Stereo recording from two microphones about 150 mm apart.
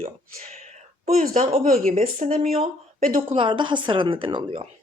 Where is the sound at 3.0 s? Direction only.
65° right (ahead or behind).